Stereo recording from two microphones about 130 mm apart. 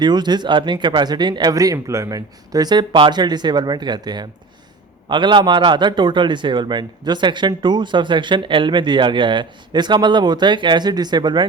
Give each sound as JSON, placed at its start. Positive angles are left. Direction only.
{"t": 0.0, "sound": "a man's voice", "side_deg": -35}